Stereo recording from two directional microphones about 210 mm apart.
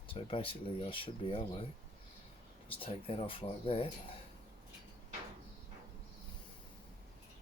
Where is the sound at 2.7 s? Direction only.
25° left (ahead or behind).